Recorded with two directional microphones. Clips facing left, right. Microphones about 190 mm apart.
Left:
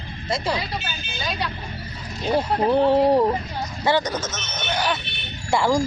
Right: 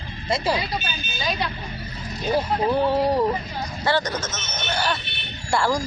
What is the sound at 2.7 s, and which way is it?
Speech, 25° left (ahead or behind).